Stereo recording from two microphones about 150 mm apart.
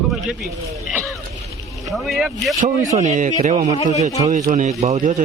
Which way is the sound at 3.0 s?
55° right (ahead or behind).